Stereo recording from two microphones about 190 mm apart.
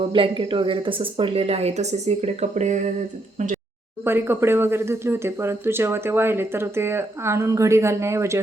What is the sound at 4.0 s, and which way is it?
Speech, 10° right (ahead or behind).